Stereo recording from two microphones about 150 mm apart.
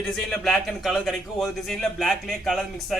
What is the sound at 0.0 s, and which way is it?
A man's voice, 5° left (ahead or behind).